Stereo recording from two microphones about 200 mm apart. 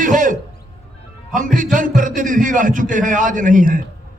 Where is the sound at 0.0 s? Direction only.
40° right (ahead or behind).